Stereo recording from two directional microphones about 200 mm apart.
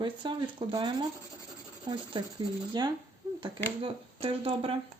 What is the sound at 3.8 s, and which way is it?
Speech, 30° right (ahead or behind).